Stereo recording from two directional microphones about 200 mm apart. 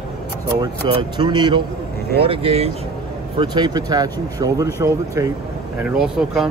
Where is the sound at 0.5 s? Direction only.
20° right (ahead or behind).